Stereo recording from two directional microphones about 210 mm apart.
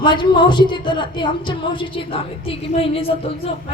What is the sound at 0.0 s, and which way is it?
A woman's voice, 20° left (ahead or behind).